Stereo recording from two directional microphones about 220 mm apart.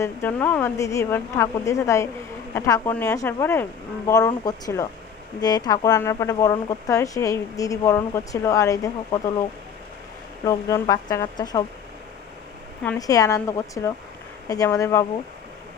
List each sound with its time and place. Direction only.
0.0 s speech: 10° left (ahead or behind)
10.4 s speech: 15° left (ahead or behind)
12.8 s speech: 10° left (ahead or behind)